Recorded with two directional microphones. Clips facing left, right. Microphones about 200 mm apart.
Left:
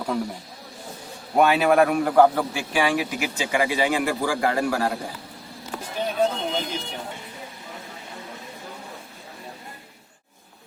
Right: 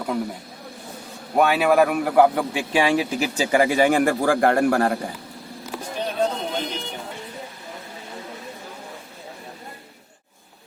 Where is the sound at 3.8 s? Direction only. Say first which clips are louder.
Right 5 dB; 55° right (ahead or behind).